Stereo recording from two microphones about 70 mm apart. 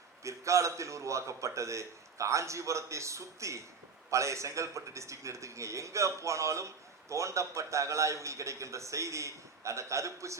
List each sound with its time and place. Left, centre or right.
0.2 s a man's voice: right